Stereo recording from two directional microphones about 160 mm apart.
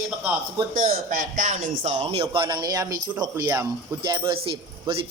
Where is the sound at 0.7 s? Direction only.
60° right (ahead or behind); by 2.2 s 40° right (ahead or behind).